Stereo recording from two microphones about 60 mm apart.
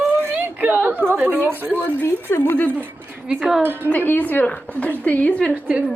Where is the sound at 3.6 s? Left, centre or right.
Right.